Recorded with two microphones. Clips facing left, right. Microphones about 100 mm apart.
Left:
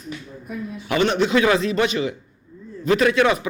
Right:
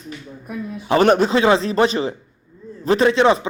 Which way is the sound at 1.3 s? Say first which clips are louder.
Right 2 dB; 30° right (ahead or behind).